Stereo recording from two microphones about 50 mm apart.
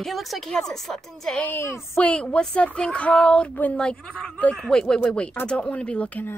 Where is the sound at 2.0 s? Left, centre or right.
Left.